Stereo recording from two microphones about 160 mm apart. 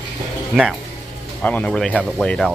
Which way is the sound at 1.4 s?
10° left (ahead or behind).